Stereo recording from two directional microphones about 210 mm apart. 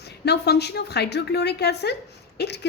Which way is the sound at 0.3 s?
50° left (ahead or behind).